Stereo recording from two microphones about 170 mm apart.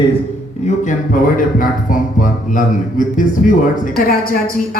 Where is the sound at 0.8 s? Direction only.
55° left (ahead or behind).